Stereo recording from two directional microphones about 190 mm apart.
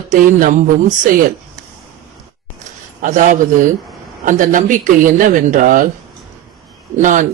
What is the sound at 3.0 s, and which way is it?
Speech, 40° right (ahead or behind).